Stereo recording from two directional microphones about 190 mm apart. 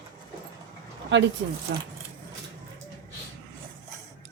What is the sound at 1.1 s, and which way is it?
Speech, 70° right (ahead or behind).